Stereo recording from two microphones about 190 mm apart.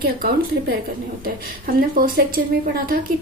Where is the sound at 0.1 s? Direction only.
50° right (ahead or behind).